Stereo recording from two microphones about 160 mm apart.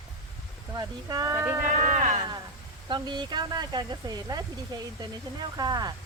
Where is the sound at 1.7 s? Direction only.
45° right (ahead or behind).